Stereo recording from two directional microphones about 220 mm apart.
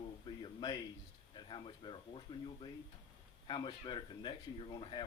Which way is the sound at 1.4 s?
20° left (ahead or behind).